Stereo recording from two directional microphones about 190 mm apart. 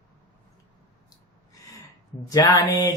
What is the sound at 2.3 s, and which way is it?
Speech, 20° left (ahead or behind).